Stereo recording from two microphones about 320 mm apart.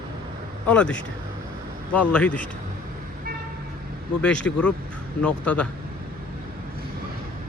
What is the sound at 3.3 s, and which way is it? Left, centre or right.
Vehicle, right.